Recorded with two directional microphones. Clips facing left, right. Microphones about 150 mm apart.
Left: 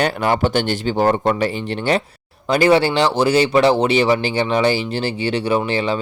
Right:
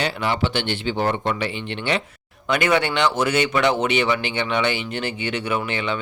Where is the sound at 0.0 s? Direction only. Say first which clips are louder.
Left 5 dB; 45° left (ahead or behind).